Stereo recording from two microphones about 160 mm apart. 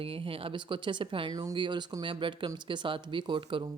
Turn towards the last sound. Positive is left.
turn(degrees=-30)  # may be behind; listen again after turning